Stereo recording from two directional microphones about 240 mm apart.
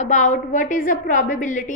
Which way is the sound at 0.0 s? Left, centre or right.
Left.